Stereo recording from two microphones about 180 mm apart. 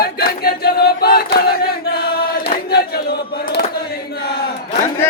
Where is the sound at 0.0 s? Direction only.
55° left (ahead or behind).